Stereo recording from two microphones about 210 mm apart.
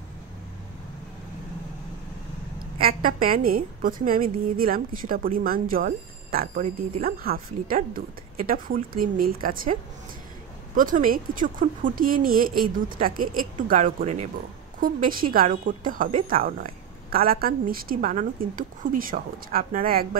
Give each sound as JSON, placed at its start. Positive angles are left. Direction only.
{"t": 2.8, "sound": "a woman's voice", "side_deg": -45}
{"t": 10.8, "sound": "a woman's voice", "side_deg": -40}